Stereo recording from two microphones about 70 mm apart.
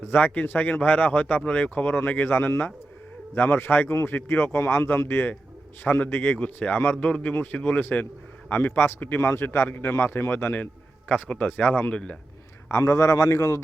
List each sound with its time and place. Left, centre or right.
0.0 s speech: left
12.7 s a man's voice: left